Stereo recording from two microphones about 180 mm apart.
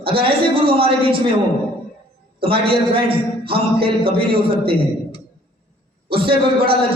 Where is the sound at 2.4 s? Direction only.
30° right (ahead or behind).